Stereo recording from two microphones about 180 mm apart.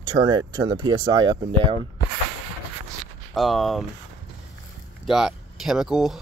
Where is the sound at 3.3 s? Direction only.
Centre (ahead or behind).